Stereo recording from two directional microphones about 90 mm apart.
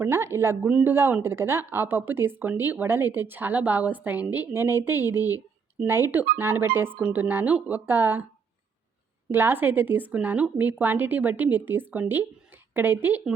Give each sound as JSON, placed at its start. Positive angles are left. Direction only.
{"t": 0.0, "sound": "speech", "side_deg": -30}
{"t": 0.7, "sound": "speech", "side_deg": -15}
{"t": 0.9, "sound": "speech", "side_deg": -25}
{"t": 9.3, "sound": "speech", "side_deg": -25}